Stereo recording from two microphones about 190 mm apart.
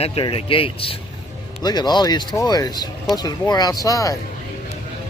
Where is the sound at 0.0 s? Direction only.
30° left (ahead or behind).